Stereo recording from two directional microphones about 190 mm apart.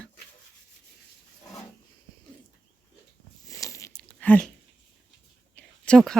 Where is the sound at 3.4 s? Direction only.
15° left (ahead or behind).